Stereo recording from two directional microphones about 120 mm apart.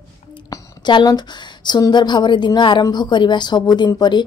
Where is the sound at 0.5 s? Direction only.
35° left (ahead or behind).